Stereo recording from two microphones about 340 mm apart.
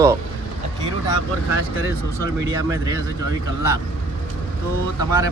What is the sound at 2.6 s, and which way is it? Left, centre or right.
Speech, centre.